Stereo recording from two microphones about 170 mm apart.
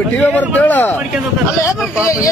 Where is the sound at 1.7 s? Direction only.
5° right (ahead or behind).